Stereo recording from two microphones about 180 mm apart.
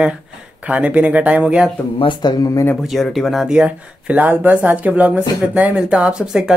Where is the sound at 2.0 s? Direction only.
25° left (ahead or behind).